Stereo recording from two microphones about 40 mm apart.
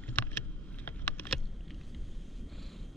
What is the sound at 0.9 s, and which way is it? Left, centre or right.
Computer keyboard, left.